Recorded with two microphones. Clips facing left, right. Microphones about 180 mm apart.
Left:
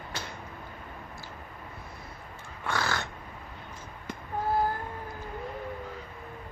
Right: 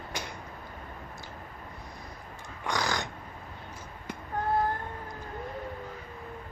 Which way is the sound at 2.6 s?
15° right (ahead or behind).